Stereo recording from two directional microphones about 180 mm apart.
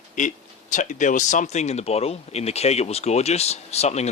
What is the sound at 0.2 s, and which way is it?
A man's voice, 40° left (ahead or behind).